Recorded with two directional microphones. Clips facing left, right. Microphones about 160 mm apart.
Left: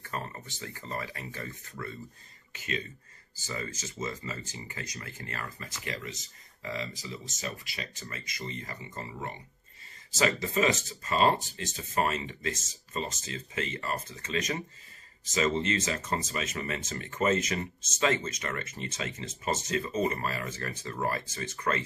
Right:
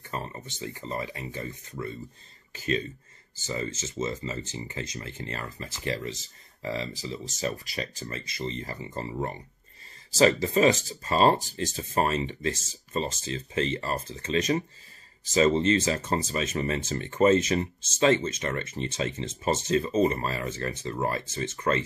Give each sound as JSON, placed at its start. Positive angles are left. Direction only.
{"t": 0.0, "sound": "speech", "side_deg": -20}
{"t": 2.5, "sound": "speech", "side_deg": -35}